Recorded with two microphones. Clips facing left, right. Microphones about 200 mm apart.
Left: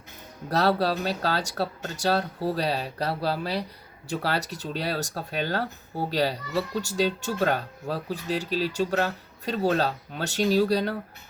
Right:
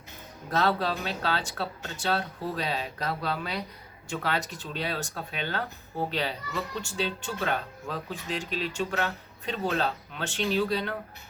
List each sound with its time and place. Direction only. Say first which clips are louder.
0.5 s speech: left 3 dB; 40° left (ahead or behind)